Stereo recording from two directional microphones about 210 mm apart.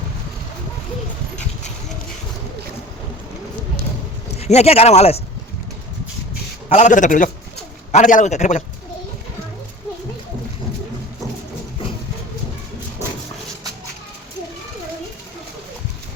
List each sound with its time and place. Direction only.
4.3 s speech: 30° left (ahead or behind)
6.7 s a man's voice: 30° left (ahead or behind)